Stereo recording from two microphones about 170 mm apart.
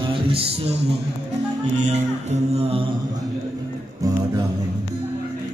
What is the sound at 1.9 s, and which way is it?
Music, 40° right (ahead or behind).